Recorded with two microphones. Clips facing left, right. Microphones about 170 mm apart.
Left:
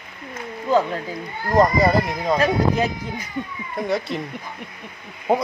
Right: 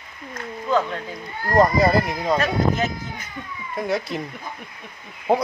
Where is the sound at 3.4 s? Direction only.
20° left (ahead or behind).